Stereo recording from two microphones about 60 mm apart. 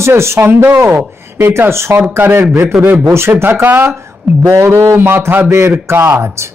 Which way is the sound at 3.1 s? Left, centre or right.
Right.